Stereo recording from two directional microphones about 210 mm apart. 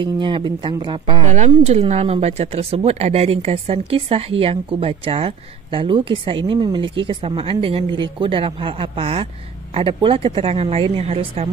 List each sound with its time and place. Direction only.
0.0 s a woman's voice: 20° right (ahead or behind)